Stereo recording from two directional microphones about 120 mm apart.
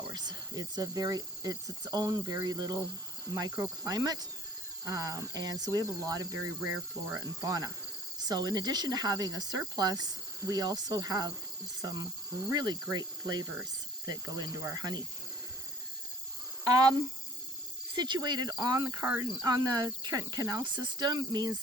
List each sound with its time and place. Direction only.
0.1 s speech: 35° right (ahead or behind)
16.6 s speech: 30° right (ahead or behind)
17.9 s speech: 35° right (ahead or behind)
19.0 s cricket: 20° right (ahead or behind)
19.3 s speech: 30° right (ahead or behind)